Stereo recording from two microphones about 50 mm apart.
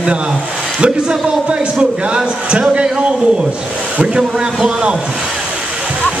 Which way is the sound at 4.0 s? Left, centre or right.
Centre.